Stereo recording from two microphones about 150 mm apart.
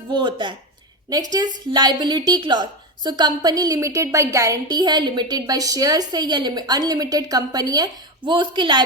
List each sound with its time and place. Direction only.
0.1 s speech: 30° right (ahead or behind)
1.7 s a woman's voice: 30° right (ahead or behind)